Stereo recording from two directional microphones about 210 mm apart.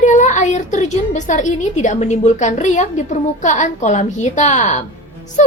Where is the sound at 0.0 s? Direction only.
35° left (ahead or behind).